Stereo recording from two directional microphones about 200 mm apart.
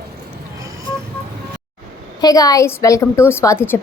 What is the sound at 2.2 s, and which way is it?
A woman's voice, 20° left (ahead or behind).